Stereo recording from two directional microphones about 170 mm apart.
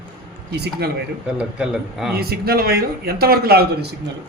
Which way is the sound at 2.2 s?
65° right (ahead or behind).